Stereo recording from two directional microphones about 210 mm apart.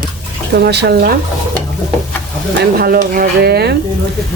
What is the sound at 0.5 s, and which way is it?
Speech, 50° right (ahead or behind).